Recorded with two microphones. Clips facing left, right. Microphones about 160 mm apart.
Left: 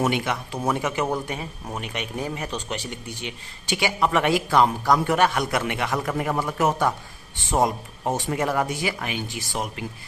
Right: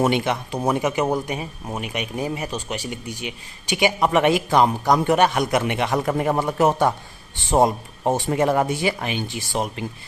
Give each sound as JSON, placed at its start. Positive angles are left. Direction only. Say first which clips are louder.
{"t": 0.0, "sound": "speech", "louder": "right 4 dB", "side_deg": -25}